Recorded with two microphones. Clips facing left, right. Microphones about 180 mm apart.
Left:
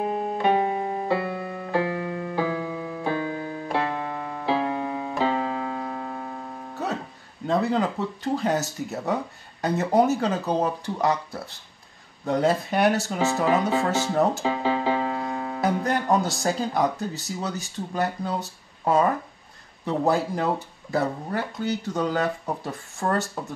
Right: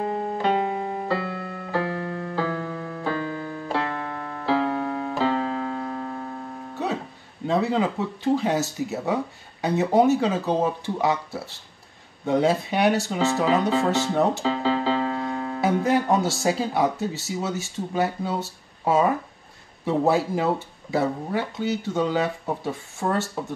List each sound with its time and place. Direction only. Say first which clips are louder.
0.0 s music: left 1 dB; 15° left (ahead or behind)
3.7 s keyboard: left 1 dB; 15° left (ahead or behind)
6.7 s music: right 2 dB; centre (ahead or behind)
7.4 s speech: right 1 dB; centre (ahead or behind)
14.4 s music: right 1 dB; 15° left (ahead or behind)
15.6 s speech: right 3 dB; 5° right (ahead or behind)